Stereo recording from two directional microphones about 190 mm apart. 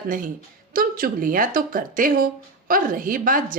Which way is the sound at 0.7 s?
50° right (ahead or behind).